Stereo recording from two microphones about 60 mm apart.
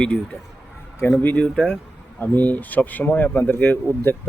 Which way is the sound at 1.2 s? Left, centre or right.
Left.